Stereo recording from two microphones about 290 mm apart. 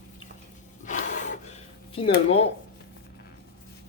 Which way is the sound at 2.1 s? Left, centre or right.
Left.